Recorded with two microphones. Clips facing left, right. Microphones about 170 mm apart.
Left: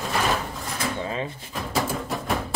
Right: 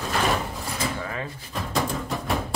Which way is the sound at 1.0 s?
20° left (ahead or behind).